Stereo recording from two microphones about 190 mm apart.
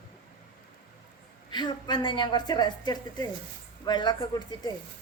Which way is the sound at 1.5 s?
25° left (ahead or behind).